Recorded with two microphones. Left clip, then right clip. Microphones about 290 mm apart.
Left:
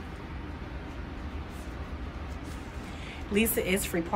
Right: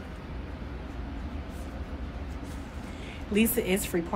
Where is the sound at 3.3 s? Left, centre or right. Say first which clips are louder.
Right 1 dB; centre.